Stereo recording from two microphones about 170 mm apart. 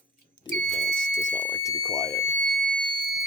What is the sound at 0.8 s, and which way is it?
Fire alarm, 5° left (ahead or behind).